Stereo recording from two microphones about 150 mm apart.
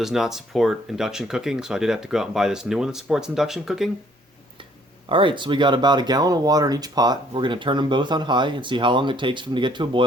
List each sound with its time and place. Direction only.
0.0 s speech: 5° right (ahead or behind)
5.0 s speech: 35° right (ahead or behind)